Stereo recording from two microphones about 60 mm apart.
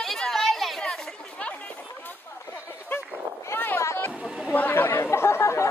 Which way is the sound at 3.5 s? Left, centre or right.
Left.